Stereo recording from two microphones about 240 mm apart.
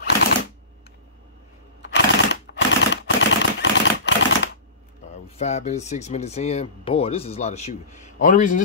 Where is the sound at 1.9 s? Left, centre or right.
Left.